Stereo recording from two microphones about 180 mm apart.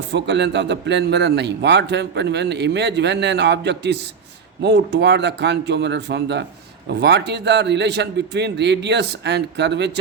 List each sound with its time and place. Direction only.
0.1 s a man's voice: 70° right (ahead or behind)